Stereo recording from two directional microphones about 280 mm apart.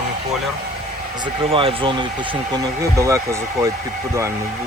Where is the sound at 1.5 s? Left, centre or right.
Centre.